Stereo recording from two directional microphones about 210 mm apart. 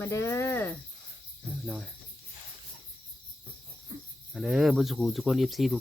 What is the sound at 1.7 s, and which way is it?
Speech, centre (ahead or behind).